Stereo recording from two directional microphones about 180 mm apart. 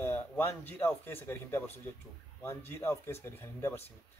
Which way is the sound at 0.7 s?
10° left (ahead or behind).